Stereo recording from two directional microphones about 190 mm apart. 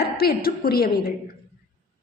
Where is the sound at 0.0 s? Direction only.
55° left (ahead or behind).